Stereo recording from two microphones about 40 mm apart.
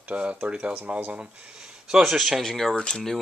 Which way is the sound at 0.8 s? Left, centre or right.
Right.